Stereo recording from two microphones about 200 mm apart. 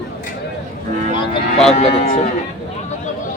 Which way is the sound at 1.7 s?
35° left (ahead or behind).